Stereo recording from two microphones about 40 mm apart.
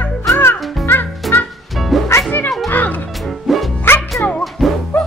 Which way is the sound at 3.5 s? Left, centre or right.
Centre.